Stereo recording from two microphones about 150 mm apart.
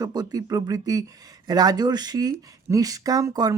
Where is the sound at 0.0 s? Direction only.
25° right (ahead or behind).